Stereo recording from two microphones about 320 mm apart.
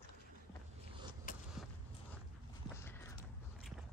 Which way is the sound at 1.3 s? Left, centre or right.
Left.